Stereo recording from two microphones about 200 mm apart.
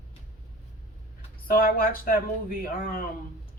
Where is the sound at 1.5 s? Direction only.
45° left (ahead or behind).